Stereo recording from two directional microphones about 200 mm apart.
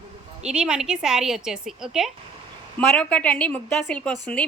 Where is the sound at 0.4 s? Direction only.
5° right (ahead or behind).